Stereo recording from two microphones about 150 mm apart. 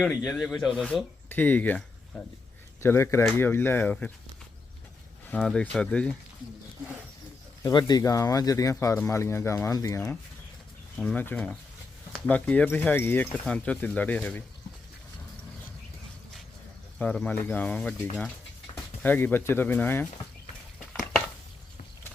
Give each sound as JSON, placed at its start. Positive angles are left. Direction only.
{"t": 0.3, "sound": "speech", "side_deg": 0}
{"t": 0.9, "sound": "speech", "side_deg": 10}
{"t": 5.3, "sound": "speech", "side_deg": 5}
{"t": 7.6, "sound": "speech", "side_deg": 30}
{"t": 10.9, "sound": "speech", "side_deg": 0}
{"t": 17.0, "sound": "speech", "side_deg": 10}